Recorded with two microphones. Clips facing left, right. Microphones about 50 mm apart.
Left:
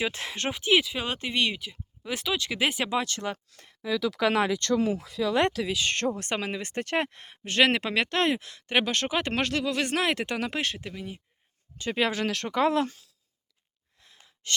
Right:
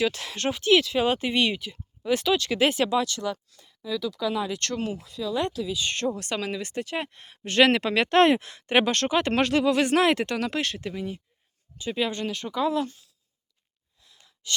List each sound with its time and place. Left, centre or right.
0.0 s speech: left
0.9 s speech: centre
2.9 s speech: left
3.3 s speech: left
5.2 s speech: left
6.1 s speech: left
6.8 s speech: left
7.4 s speech: centre
8.4 s speech: right
8.9 s speech: centre
10.2 s speech: centre
10.8 s speech: centre
11.8 s speech: left
14.4 s gasp: left